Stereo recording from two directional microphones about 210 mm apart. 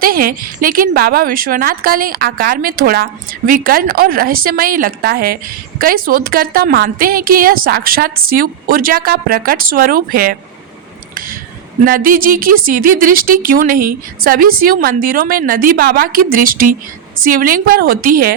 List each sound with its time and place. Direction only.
0.0 s a woman's voice: 45° right (ahead or behind)
11.9 s a woman's voice: 40° right (ahead or behind)